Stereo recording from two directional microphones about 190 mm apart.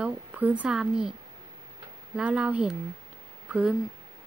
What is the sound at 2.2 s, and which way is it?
Speech, 5° right (ahead or behind).